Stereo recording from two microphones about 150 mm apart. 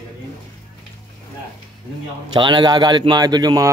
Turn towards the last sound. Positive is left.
turn(degrees=-25)  # may be behind; listen again after turning